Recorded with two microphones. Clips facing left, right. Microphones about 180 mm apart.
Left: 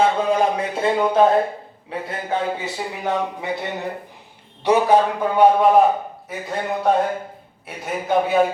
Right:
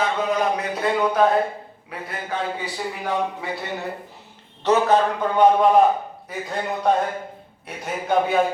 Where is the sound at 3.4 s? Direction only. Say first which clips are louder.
Left 4 dB; 20° left (ahead or behind).